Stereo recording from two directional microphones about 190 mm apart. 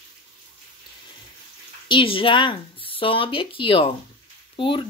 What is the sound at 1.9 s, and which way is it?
Speech, 25° left (ahead or behind).